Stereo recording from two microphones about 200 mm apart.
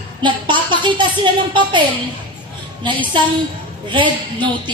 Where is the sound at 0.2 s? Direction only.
25° right (ahead or behind).